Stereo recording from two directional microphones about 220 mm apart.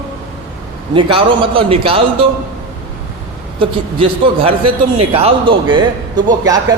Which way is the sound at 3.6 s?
25° right (ahead or behind).